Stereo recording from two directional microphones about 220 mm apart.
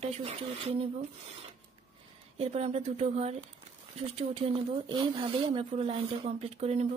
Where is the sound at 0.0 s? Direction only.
25° right (ahead or behind).